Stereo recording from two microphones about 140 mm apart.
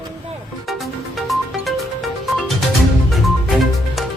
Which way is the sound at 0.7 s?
Centre (ahead or behind).